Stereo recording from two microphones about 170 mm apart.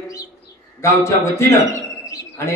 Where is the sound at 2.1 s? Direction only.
20° left (ahead or behind).